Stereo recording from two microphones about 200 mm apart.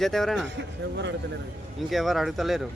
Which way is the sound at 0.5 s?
60° right (ahead or behind).